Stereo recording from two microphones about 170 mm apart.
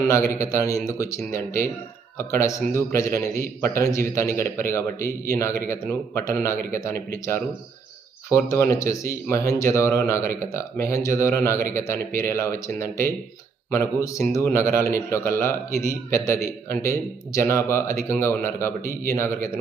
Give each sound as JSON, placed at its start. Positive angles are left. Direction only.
{"t": 0.1, "sound": "a man's voice", "side_deg": 15}